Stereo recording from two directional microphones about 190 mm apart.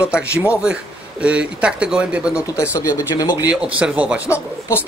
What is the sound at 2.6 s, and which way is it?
Speech, 15° left (ahead or behind).